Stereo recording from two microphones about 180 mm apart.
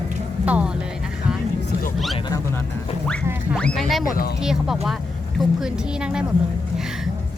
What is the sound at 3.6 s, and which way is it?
A woman's voice, 5° left (ahead or behind).